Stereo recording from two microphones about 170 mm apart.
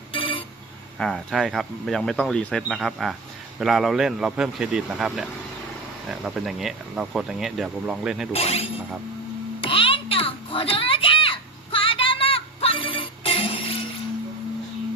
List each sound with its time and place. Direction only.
0.1 s telephone: 30° left (ahead or behind)
0.9 s speech: centre (ahead or behind)
8.3 s speech: 35° left (ahead or behind)
9.6 s a sound: 30° left (ahead or behind)